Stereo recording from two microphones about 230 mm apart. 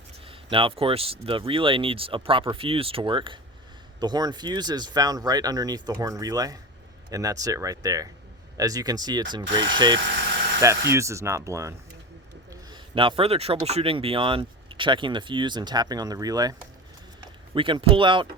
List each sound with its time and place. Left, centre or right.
0.3 s speech: right